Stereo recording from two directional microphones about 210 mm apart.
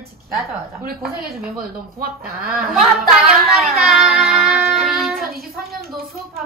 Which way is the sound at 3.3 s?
Centre (ahead or behind).